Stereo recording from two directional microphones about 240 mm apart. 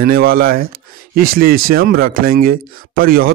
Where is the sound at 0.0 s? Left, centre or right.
Right.